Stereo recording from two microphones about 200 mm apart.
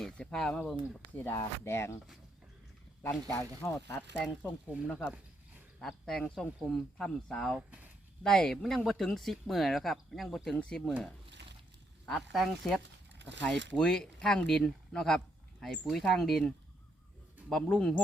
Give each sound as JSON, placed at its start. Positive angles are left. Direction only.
{"t": 0.0, "sound": "speech", "side_deg": 5}
{"t": 3.0, "sound": "speech", "side_deg": 15}
{"t": 13.1, "sound": "a sound", "side_deg": -60}
{"t": 13.7, "sound": "speech", "side_deg": 5}
{"t": 17.5, "sound": "speech", "side_deg": 5}